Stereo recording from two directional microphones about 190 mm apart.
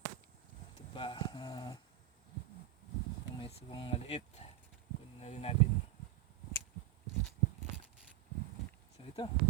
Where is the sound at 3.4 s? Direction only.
30° left (ahead or behind).